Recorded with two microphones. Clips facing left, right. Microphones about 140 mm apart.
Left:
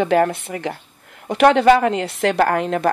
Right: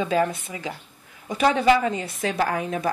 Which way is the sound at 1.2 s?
70° left (ahead or behind).